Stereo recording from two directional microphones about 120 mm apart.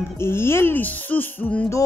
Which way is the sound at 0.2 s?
20° left (ahead or behind).